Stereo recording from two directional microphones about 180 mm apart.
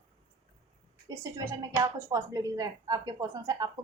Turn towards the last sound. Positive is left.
turn(degrees=-20)  # may be behind; listen again after turning